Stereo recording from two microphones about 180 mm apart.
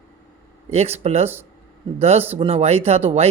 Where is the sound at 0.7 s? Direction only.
35° right (ahead or behind).